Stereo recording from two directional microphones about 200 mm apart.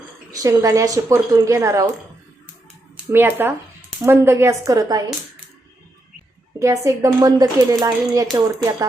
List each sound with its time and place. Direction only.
0.3 s speech: 15° right (ahead or behind)
3.1 s speech: 10° right (ahead or behind)
6.6 s speech: 15° right (ahead or behind)